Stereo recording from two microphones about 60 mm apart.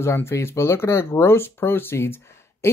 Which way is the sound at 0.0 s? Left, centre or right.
Left.